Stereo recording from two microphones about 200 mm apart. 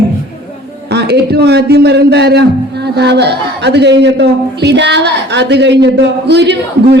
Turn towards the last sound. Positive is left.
turn(degrees=-60)  # may be behind; listen again after turning